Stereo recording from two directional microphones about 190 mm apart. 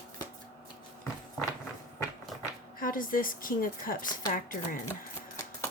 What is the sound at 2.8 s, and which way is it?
A woman's voice, 45° left (ahead or behind).